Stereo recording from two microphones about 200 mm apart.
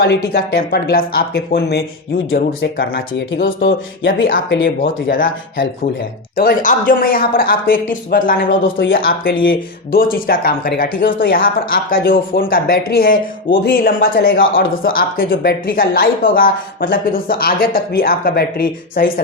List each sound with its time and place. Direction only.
0.0 s speech: 50° left (ahead or behind)
3.4 s speech: 70° left (ahead or behind)
4.3 s speech: 60° left (ahead or behind)
5.0 s speech: 45° left (ahead or behind)